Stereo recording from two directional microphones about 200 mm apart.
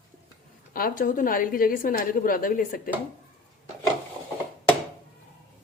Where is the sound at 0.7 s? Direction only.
45° left (ahead or behind).